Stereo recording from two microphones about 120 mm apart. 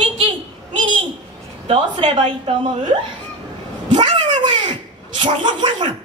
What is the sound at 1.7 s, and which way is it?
Speech, 45° right (ahead or behind).